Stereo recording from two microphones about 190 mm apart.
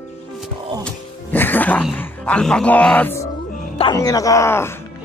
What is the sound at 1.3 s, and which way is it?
Music, 10° left (ahead or behind).